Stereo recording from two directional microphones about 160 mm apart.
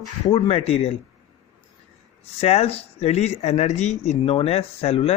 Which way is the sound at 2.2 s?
40° left (ahead or behind).